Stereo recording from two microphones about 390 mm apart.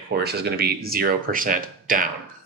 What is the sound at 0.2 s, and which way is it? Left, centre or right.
Speech, right.